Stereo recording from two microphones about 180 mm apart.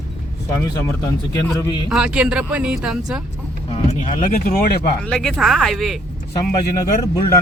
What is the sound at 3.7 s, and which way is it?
Speech, 40° left (ahead or behind).